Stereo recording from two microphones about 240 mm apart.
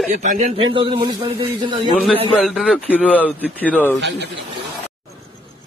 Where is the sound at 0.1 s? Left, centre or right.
Right.